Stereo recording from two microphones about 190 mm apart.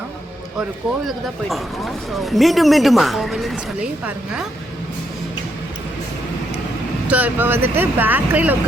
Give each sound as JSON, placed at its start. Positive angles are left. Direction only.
{"t": 1.0, "sound": "speech", "side_deg": 0}
{"t": 7.1, "sound": "speech", "side_deg": -10}